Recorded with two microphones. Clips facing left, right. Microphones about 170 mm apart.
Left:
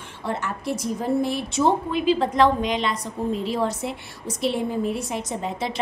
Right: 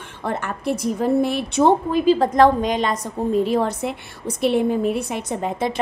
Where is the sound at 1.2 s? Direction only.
60° right (ahead or behind).